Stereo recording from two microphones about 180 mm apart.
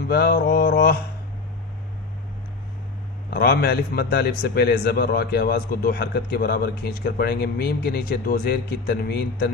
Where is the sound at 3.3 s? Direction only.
60° left (ahead or behind).